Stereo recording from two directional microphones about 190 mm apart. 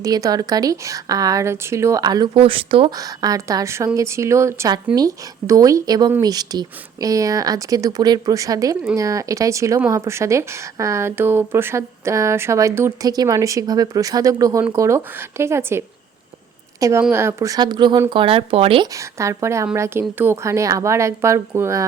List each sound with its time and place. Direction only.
0.0 s speech: 20° right (ahead or behind)
3.0 s speech: 20° right (ahead or behind)
17.0 s speech: 10° right (ahead or behind); by 18.9 s 30° right (ahead or behind)
18.9 s speech: 15° right (ahead or behind)